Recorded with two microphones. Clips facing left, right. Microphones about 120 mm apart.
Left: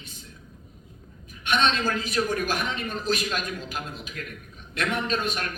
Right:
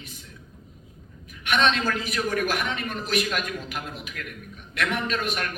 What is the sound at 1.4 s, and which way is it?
A man's voice, 35° left (ahead or behind).